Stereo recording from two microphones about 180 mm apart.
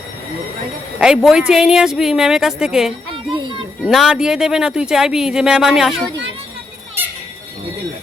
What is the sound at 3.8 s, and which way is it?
Speech, 5° right (ahead or behind).